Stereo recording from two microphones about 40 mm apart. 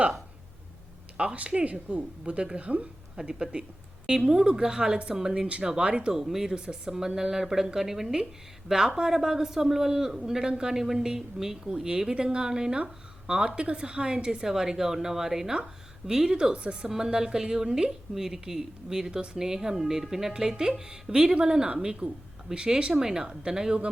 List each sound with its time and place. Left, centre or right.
1.1 s a woman's voice: right
5.3 s a woman's voice: right
6.1 s a woman's voice: centre; by 16.9 s right
16.9 s speech: centre